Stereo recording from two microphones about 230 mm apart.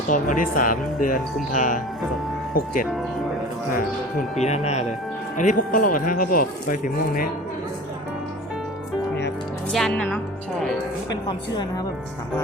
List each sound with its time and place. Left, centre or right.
0.1 s speech: left
4.4 s a woman's voice: left
9.7 s a woman's voice: centre
11.3 s a woman's voice: centre